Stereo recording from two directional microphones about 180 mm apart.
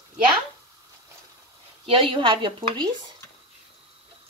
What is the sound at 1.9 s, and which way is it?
Speech, 30° right (ahead or behind).